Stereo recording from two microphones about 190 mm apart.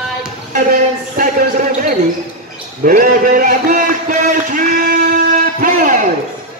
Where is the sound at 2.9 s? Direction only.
45° right (ahead or behind).